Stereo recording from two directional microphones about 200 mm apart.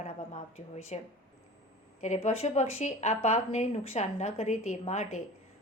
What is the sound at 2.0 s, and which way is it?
Speech, 35° left (ahead or behind).